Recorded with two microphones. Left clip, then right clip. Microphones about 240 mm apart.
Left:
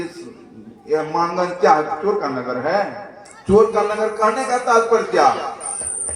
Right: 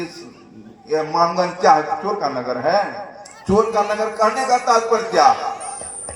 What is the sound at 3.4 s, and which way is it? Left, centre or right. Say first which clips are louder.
A man's voice: left 2 dB; right.